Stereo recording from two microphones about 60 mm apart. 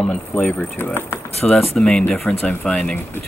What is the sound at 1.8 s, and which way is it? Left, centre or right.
Speech, centre.